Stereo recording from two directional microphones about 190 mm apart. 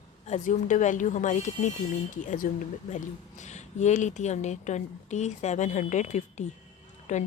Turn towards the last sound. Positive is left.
turn(degrees=40)  # may be behind; listen again after turning